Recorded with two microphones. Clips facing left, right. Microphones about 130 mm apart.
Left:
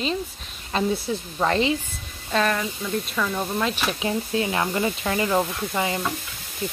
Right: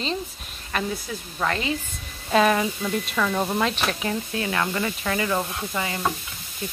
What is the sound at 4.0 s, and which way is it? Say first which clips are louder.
Speech: left 3 dB; 20° left (ahead or behind).